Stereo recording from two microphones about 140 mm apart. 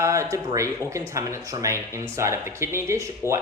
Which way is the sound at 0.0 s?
20° right (ahead or behind).